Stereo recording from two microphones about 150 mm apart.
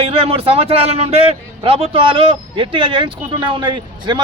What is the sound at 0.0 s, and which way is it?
A man's voice, 40° right (ahead or behind).